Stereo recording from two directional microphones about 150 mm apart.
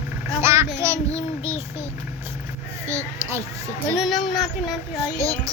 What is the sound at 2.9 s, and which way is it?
Speech, 20° right (ahead or behind).